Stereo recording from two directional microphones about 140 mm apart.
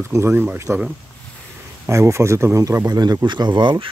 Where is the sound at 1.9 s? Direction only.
20° right (ahead or behind).